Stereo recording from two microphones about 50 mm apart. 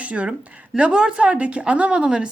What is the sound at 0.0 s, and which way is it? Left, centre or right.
A woman's voice, right.